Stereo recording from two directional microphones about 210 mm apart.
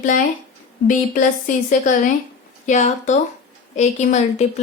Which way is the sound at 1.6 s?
40° left (ahead or behind).